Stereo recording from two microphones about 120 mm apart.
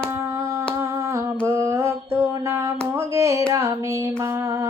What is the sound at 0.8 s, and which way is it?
Humming, 25° right (ahead or behind).